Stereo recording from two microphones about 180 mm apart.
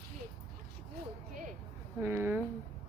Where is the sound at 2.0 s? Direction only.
10° right (ahead or behind).